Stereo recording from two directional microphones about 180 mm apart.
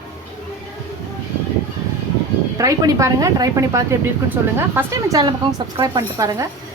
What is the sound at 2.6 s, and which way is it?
A woman's voice, 20° right (ahead or behind).